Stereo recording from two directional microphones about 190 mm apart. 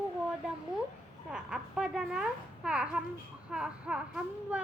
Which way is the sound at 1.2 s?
5° right (ahead or behind).